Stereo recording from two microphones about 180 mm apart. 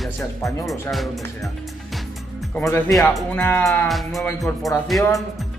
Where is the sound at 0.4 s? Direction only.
15° left (ahead or behind).